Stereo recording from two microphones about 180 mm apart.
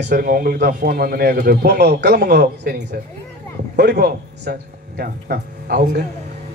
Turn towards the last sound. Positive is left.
turn(degrees=-60)  # may be behind; listen again after turning